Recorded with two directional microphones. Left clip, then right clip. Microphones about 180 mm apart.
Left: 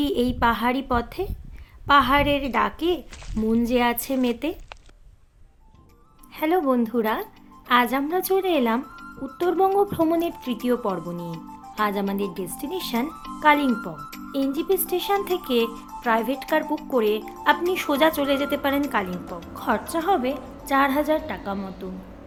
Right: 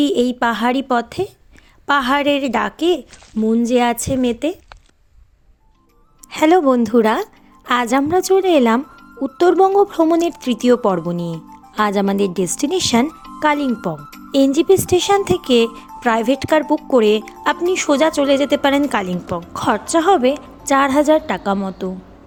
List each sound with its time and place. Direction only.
0.0 s a woman's voice: 35° right (ahead or behind)
6.3 s a woman's voice: 50° right (ahead or behind)